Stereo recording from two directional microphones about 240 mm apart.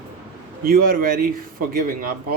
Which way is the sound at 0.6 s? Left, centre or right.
Right.